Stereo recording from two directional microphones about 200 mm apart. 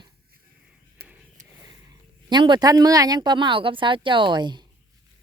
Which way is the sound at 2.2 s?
20° right (ahead or behind).